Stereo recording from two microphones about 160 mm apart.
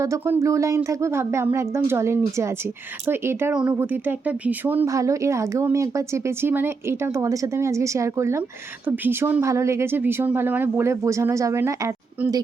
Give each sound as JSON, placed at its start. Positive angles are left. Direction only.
{"t": 0.0, "sound": "speech", "side_deg": -15}